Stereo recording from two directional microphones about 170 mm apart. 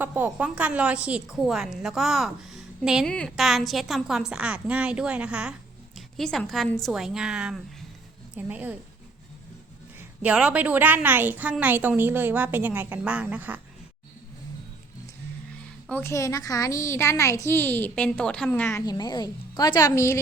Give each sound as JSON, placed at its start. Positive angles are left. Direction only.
{"t": 0.0, "sound": "a woman's voice", "side_deg": -10}
{"t": 10.2, "sound": "a woman's voice", "side_deg": -5}
{"t": 15.9, "sound": "a woman's voice", "side_deg": 15}
{"t": 18.9, "sound": "a woman's voice", "side_deg": 25}